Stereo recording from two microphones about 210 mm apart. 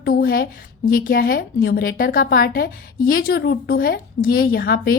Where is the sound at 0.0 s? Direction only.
45° left (ahead or behind).